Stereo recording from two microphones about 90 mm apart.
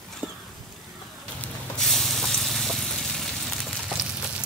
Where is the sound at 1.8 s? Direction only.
5° left (ahead or behind).